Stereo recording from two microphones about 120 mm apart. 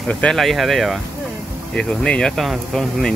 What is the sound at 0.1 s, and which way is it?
Speech, 5° left (ahead or behind).